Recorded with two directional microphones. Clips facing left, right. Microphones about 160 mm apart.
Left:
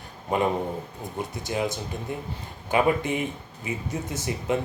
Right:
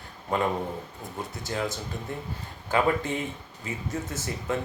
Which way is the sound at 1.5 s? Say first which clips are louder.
Left 3 dB; 15° left (ahead or behind).